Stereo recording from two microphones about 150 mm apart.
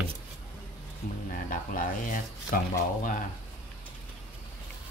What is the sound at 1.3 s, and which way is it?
Speech, 65° left (ahead or behind).